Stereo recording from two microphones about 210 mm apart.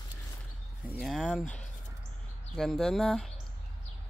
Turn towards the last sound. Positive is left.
turn(degrees=0)  # may be behind; listen again after turning